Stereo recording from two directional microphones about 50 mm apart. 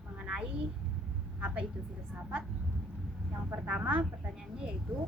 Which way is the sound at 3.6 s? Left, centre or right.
Right.